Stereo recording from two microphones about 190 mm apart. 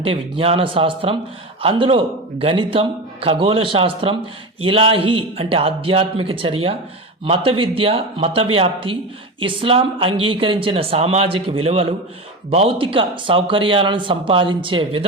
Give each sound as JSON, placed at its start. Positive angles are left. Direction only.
{"t": 0.0, "sound": "speech", "side_deg": -30}